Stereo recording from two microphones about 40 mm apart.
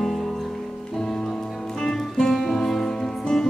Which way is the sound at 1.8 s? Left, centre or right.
Centre.